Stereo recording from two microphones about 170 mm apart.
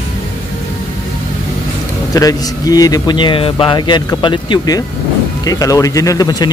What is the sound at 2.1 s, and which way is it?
A man's voice, 20° left (ahead or behind).